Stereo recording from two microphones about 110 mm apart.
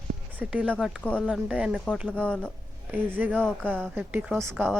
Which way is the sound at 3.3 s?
10° left (ahead or behind).